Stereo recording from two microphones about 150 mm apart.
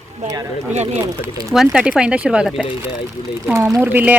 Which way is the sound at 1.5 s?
5° right (ahead or behind).